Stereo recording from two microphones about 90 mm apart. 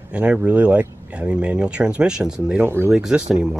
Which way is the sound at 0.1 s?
15° right (ahead or behind).